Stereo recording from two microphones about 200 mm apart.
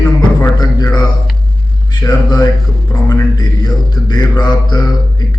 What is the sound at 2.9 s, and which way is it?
Mantra, 20° left (ahead or behind).